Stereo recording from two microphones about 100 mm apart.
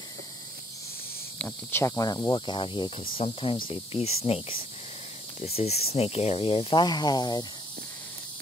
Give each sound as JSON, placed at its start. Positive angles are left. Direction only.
{"t": 1.4, "sound": "speech", "side_deg": 25}
{"t": 2.4, "sound": "speech", "side_deg": 55}
{"t": 3.2, "sound": "speech", "side_deg": 70}
{"t": 5.4, "sound": "speech", "side_deg": 90}
{"t": 6.8, "sound": "speech", "side_deg": 45}